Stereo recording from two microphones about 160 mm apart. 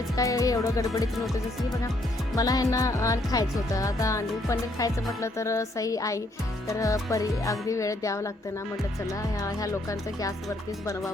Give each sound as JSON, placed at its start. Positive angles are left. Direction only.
{"t": 0.2, "sound": "speech", "side_deg": 20}
{"t": 2.3, "sound": "speech", "side_deg": 20}